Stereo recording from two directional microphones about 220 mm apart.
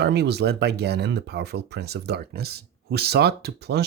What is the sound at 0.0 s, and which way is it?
Speech, 50° right (ahead or behind).